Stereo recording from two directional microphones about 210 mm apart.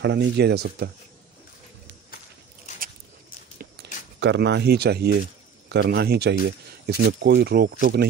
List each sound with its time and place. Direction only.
0.0 s speech: 55° right (ahead or behind)
4.2 s speech: 55° right (ahead or behind)